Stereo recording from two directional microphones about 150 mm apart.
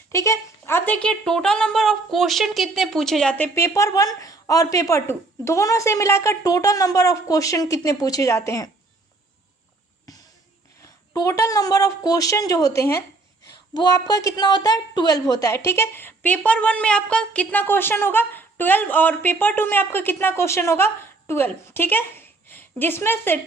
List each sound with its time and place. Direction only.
0.1 s speech: 20° left (ahead or behind)
10.1 s music: 25° left (ahead or behind)
11.1 s a woman's voice: 25° left (ahead or behind)